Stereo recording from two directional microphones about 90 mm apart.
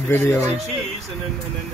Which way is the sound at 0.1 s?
25° left (ahead or behind).